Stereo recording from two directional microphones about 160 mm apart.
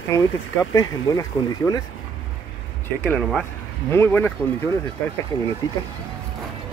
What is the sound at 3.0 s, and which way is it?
Speech, 5° left (ahead or behind).